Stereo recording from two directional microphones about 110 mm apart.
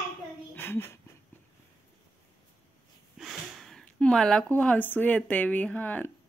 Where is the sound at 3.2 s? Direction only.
Centre (ahead or behind).